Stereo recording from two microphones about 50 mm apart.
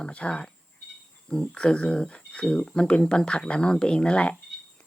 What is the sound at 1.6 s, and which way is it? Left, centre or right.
Speech, left.